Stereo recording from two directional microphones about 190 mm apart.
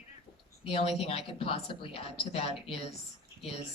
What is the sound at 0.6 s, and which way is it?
Speech, 30° left (ahead or behind).